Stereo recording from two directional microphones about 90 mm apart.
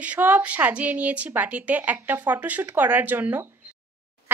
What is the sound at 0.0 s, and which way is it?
Speech, 20° right (ahead or behind).